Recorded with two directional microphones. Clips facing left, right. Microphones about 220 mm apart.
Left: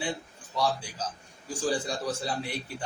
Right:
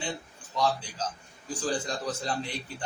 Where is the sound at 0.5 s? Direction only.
10° left (ahead or behind).